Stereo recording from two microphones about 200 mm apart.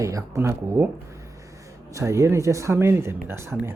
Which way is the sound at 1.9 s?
15° right (ahead or behind).